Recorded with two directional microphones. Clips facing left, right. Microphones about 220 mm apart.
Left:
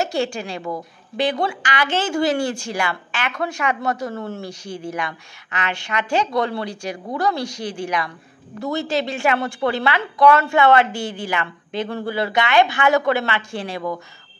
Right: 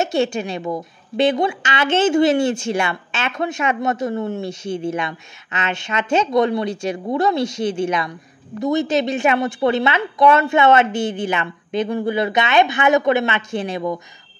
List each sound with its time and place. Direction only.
0.0 s a woman's voice: 20° right (ahead or behind)